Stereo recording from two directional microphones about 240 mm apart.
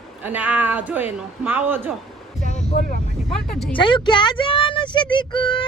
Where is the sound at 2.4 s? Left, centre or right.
Left.